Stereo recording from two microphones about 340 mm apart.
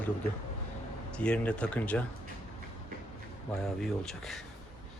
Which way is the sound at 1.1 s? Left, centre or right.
Centre.